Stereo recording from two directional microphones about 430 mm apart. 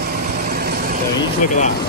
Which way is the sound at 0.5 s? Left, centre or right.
Right.